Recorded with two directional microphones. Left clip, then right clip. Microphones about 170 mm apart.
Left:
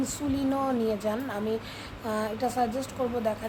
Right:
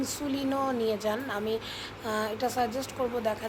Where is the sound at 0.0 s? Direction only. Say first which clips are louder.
Left 2 dB; 15° left (ahead or behind).